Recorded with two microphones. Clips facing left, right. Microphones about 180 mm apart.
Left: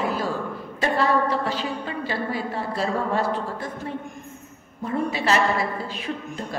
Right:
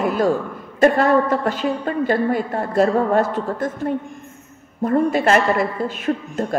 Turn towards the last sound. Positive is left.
turn(degrees=-50)  # may be behind; listen again after turning